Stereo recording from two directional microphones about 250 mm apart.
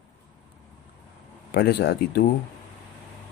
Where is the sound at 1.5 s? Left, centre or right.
Left.